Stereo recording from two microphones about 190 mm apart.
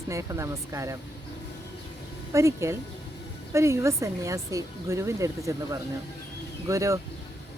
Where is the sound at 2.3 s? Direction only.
15° right (ahead or behind).